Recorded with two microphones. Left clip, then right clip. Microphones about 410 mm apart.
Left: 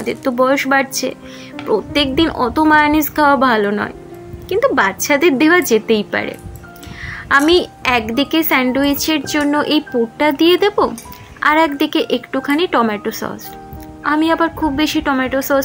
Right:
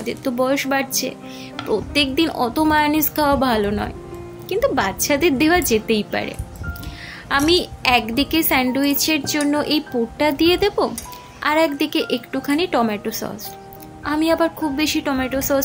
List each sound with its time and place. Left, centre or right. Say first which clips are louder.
0.0 s a woman's voice: left 6 dB; right